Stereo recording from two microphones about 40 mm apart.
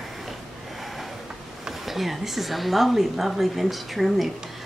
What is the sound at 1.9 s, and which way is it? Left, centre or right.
Speech, centre.